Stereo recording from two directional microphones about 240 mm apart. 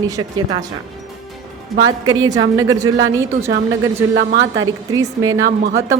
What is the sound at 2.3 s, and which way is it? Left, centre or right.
Speech, centre.